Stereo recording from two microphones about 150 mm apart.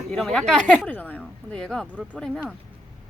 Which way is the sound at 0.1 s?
5° left (ahead or behind).